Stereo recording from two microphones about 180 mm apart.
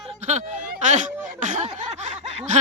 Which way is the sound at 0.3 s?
40° right (ahead or behind).